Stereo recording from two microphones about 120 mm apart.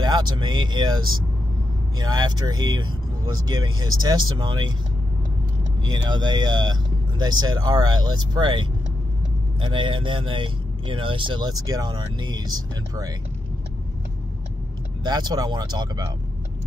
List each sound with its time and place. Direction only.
0.0 s speech: 35° right (ahead or behind)
5.9 s speech: 35° right (ahead or behind)
15.0 s speech: 35° right (ahead or behind)